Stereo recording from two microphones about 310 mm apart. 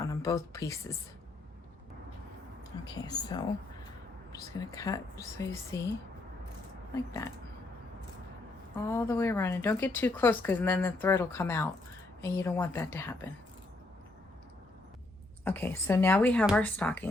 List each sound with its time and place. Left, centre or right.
0.1 s speech: centre
2.9 s speech: centre
6.9 s speech: centre
8.7 s speech: centre
15.4 s speech: centre